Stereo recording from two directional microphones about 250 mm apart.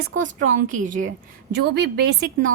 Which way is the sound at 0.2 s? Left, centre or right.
Right.